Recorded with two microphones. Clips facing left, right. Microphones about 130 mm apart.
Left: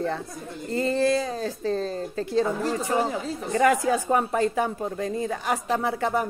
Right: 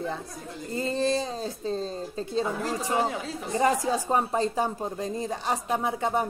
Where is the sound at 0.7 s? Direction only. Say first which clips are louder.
Left 4 dB; 20° right (ahead or behind).